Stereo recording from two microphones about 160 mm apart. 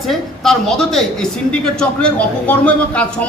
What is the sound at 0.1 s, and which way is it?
Speech, centre (ahead or behind).